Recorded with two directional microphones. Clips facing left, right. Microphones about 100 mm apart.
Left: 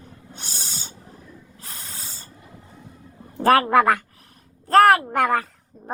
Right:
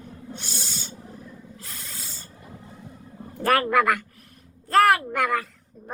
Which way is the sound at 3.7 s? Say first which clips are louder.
Left 4 dB; 35° left (ahead or behind).